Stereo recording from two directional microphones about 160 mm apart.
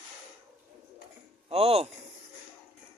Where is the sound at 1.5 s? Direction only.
40° right (ahead or behind).